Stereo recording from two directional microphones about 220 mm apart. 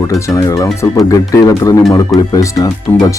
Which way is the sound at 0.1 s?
15° left (ahead or behind).